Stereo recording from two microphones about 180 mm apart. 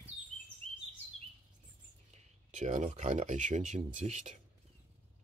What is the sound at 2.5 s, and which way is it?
Speech, 40° right (ahead or behind).